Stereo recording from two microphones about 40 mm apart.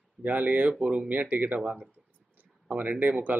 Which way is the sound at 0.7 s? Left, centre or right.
Right.